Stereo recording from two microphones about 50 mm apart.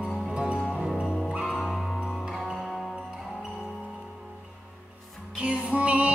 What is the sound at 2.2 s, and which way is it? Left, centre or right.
Music, centre.